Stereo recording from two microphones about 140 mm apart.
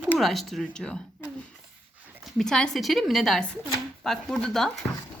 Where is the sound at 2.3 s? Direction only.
5° left (ahead or behind).